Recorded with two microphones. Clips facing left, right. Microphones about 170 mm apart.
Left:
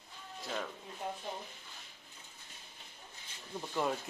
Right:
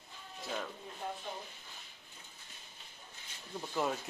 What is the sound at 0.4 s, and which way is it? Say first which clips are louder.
Speech: even; centre (ahead or behind).